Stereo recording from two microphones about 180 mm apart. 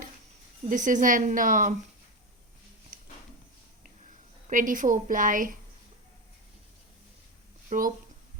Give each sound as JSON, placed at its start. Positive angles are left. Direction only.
{"t": 0.7, "sound": "speech", "side_deg": -45}
{"t": 3.8, "sound": "a sound", "side_deg": -45}
{"t": 7.7, "sound": "speech", "side_deg": -50}